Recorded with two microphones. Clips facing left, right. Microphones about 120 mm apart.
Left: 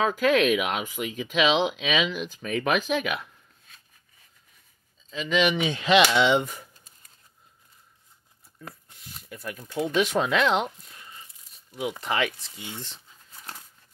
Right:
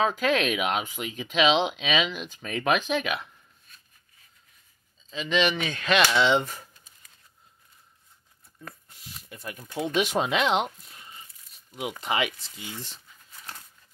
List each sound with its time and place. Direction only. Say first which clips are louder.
0.0 s speech: left 3 dB; 5° left (ahead or behind)
5.1 s speech: left 1 dB; 5° left (ahead or behind)
5.5 s speech: left 4 dB; 15° left (ahead or behind)
9.3 s speech: left 3 dB; 5° right (ahead or behind)
9.9 s speech: left 1 dB; 20° right (ahead or behind)
12.0 s speech: right 1 dB; 15° right (ahead or behind)
13.1 s a sound: left 1 dB; 20° left (ahead or behind)